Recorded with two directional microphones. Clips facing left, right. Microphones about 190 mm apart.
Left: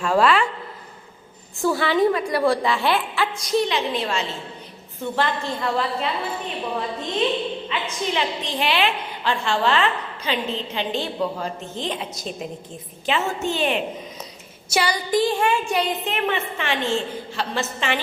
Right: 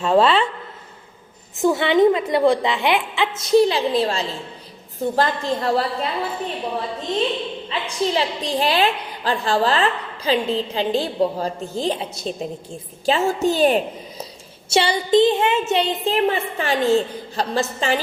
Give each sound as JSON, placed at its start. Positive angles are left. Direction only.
{"t": 0.0, "sound": "a woman's voice", "side_deg": -25}
{"t": 1.6, "sound": "a woman's voice", "side_deg": -20}
{"t": 3.5, "sound": "a woman's voice", "side_deg": -35}
{"t": 7.7, "sound": "a woman's voice", "side_deg": -35}